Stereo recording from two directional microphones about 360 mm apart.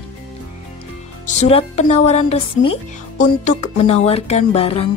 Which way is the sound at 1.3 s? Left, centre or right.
Centre.